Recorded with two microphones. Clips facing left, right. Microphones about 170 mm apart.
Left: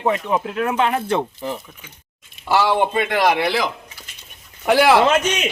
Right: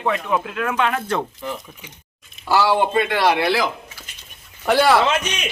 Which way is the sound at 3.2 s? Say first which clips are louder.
Left 2 dB; 15° left (ahead or behind).